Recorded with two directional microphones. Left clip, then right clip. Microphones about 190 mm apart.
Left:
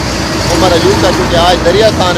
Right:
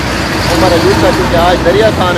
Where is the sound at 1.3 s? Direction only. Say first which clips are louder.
Even; 20° left (ahead or behind).